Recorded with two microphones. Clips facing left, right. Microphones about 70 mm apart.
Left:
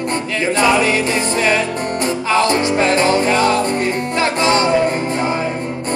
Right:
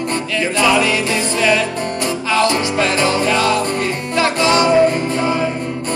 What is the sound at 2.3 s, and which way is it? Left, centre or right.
Music, left.